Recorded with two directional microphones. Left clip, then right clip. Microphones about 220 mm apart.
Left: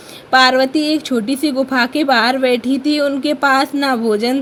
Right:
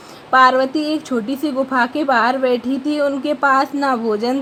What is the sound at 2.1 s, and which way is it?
Speech, 35° left (ahead or behind).